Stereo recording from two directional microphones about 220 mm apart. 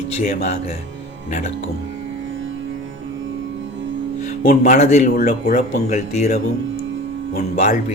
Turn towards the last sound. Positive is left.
turn(degrees=35)  # may be behind; listen again after turning